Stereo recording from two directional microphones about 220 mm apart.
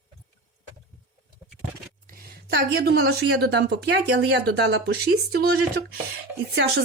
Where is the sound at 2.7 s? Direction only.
50° right (ahead or behind).